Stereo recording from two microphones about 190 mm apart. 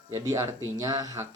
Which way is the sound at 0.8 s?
20° right (ahead or behind).